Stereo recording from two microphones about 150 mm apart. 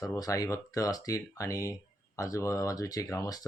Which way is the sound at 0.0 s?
25° left (ahead or behind).